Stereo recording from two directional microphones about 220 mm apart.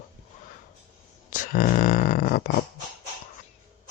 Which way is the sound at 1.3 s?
40° left (ahead or behind).